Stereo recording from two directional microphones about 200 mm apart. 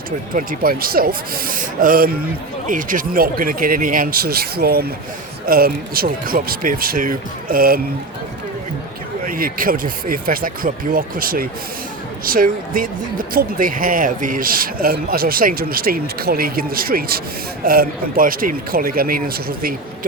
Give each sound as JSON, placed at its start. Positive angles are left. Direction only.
{"t": 0.3, "sound": "speech", "side_deg": -45}
{"t": 9.2, "sound": "speech", "side_deg": -45}